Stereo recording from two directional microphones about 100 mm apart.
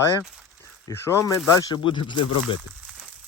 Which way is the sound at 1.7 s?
55° left (ahead or behind).